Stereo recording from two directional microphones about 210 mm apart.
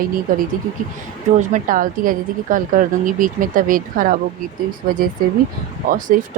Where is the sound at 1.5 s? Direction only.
40° right (ahead or behind).